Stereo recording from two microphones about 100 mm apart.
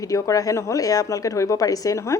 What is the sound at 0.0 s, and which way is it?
A woman's voice, 35° left (ahead or behind).